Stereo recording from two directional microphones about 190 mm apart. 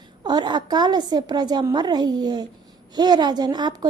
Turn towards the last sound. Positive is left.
turn(degrees=-20)  # may be behind; listen again after turning